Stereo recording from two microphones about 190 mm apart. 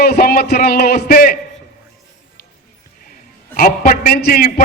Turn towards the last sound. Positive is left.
turn(degrees=55)  # may be behind; listen again after turning